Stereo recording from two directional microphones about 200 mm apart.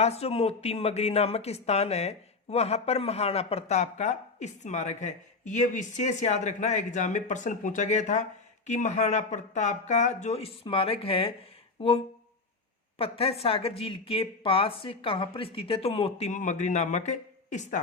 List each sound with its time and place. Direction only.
0.0 s a woman's voice: 30° left (ahead or behind)